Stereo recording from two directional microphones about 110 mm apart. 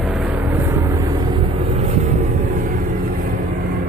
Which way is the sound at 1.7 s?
90° right.